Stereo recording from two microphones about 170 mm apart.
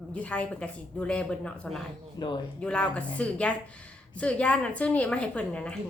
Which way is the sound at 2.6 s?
5° left (ahead or behind).